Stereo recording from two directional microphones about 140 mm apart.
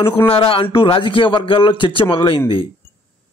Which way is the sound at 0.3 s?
40° left (ahead or behind).